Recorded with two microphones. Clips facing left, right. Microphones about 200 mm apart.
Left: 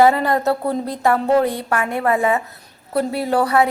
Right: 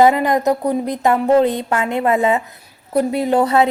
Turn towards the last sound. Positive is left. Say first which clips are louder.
# right 2 dB
turn(degrees=-20)  # may be behind; listen again after turning